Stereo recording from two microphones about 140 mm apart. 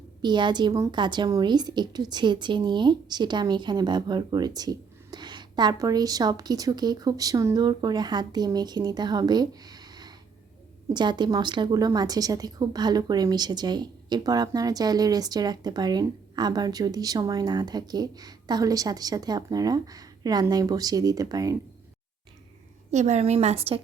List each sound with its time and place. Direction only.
0.2 s a woman's voice: 35° right (ahead or behind)
22.9 s a woman's voice: 55° right (ahead or behind)